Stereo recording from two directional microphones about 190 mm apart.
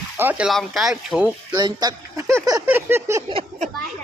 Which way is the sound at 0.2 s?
10° right (ahead or behind).